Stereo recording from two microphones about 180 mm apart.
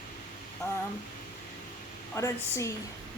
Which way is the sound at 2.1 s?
15° left (ahead or behind).